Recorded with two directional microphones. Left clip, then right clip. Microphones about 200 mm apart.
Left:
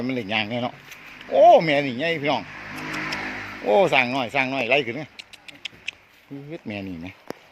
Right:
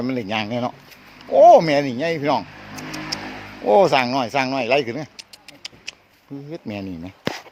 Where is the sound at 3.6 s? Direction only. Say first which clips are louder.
Right 3 dB; 15° right (ahead or behind).